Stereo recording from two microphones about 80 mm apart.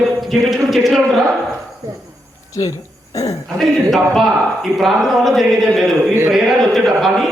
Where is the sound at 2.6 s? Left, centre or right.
Left.